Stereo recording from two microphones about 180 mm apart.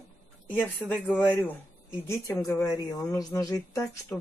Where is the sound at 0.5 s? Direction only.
10° left (ahead or behind).